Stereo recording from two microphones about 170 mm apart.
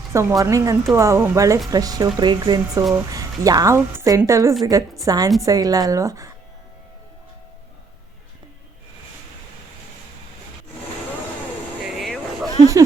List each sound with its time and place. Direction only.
0.1 s a woman's voice: 15° right (ahead or behind)
11.9 s vehicle: centre (ahead or behind)